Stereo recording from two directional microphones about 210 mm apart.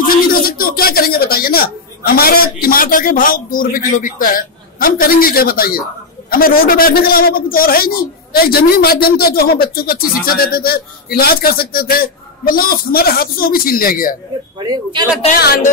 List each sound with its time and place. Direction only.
0.0 s a man's voice: 45° left (ahead or behind)
14.6 s speech: 20° right (ahead or behind)
15.2 s speech: 40° left (ahead or behind)